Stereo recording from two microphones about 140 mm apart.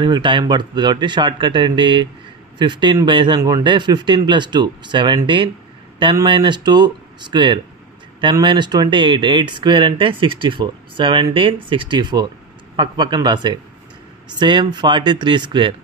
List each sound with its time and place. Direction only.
0.0 s speech: 35° right (ahead or behind)